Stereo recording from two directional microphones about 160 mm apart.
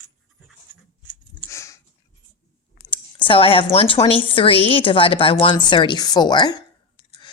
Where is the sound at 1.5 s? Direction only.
20° left (ahead or behind).